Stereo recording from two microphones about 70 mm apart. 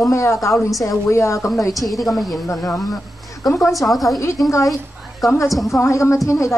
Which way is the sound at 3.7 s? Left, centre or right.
Centre.